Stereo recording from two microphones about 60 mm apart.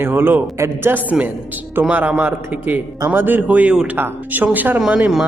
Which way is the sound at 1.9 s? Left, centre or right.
Right.